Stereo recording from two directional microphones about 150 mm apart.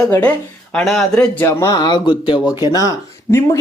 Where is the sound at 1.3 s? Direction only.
15° left (ahead or behind).